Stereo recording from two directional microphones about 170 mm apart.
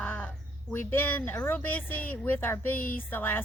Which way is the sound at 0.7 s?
10° left (ahead or behind).